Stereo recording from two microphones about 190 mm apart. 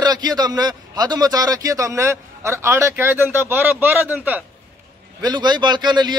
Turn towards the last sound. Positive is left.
turn(degrees=-25)  # may be behind; listen again after turning